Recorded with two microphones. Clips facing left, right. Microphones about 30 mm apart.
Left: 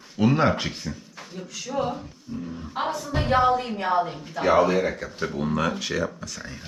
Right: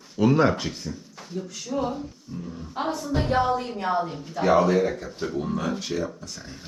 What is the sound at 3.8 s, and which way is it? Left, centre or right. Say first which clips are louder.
Speech: left 1 dB; left.